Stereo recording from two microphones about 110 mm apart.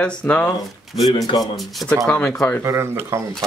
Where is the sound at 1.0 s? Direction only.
35° left (ahead or behind).